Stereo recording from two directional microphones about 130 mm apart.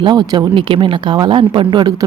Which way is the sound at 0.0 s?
35° right (ahead or behind).